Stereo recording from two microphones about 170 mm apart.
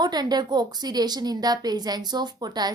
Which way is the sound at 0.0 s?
25° right (ahead or behind).